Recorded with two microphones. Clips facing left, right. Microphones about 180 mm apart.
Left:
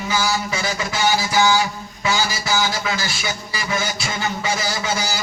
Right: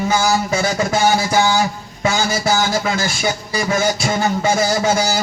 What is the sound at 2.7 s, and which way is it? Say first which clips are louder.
Speech: right 6 dB; 50° right (ahead or behind).